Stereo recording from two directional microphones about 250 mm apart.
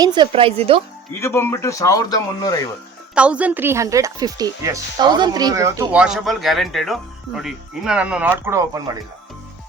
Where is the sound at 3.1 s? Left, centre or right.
Centre.